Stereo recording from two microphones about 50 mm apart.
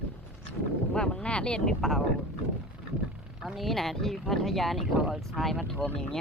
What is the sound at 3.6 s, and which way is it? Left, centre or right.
Speech, centre.